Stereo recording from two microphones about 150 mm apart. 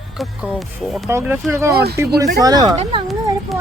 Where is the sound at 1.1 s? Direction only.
20° right (ahead or behind); by 3.0 s 35° right (ahead or behind).